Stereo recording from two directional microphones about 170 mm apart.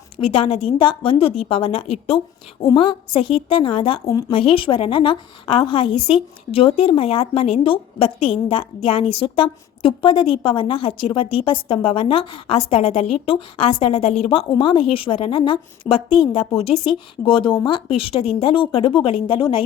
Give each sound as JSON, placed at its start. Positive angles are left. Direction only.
{"t": 0.2, "sound": "speech", "side_deg": 35}